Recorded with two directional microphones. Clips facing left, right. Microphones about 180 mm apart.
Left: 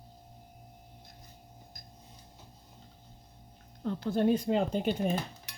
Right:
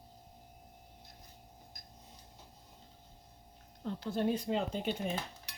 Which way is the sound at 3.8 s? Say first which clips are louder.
Left 5 dB; 55° left (ahead or behind).